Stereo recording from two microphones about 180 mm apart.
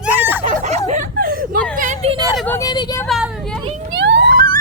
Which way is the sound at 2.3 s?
10° left (ahead or behind).